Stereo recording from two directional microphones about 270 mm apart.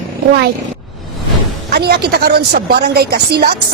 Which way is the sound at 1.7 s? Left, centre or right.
Right.